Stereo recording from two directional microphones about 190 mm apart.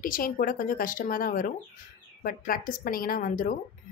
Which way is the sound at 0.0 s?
50° left (ahead or behind).